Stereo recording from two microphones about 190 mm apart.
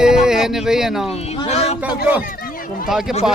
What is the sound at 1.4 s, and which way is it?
Speech, 35° left (ahead or behind).